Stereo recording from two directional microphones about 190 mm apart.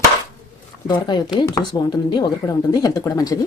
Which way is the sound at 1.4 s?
20° left (ahead or behind).